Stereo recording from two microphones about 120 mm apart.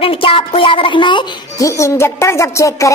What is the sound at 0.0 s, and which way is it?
Speech, 50° left (ahead or behind).